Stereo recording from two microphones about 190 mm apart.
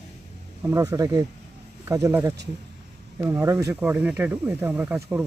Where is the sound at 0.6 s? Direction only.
15° right (ahead or behind).